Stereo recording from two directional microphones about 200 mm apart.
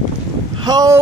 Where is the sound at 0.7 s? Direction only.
20° right (ahead or behind).